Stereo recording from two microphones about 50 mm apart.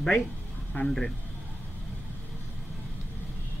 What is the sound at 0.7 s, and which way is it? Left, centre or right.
Speech, left.